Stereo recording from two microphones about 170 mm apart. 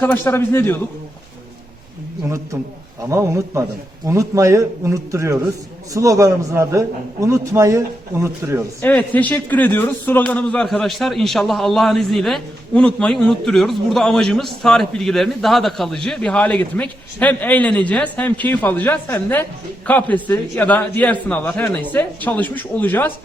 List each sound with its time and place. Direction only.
0.0 s a man's voice: 15° left (ahead or behind)
3.1 s a man's voice: 15° right (ahead or behind)
8.8 s a man's voice: 10° left (ahead or behind)